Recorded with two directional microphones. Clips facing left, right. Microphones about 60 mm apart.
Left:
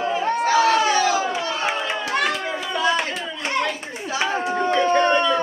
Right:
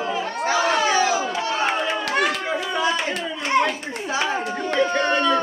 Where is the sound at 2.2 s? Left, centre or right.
Centre.